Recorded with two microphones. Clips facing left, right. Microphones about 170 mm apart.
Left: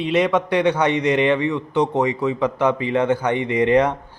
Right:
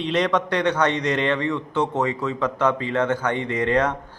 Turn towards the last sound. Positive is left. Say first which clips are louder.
# left 5 dB
turn(degrees=15)  # may be behind; listen again after turning